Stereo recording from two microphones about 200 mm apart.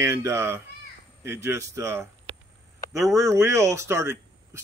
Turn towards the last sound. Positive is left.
turn(degrees=-15)  # may be behind; listen again after turning